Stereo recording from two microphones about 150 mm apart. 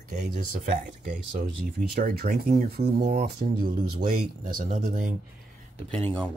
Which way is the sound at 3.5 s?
90° right.